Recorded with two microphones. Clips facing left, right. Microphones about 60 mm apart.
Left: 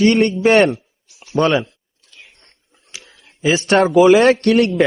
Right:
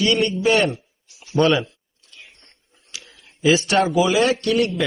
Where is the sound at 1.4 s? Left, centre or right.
Left.